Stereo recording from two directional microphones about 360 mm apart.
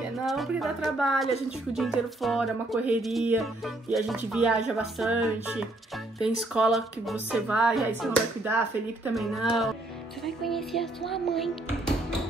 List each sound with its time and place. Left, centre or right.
0.2 s music: centre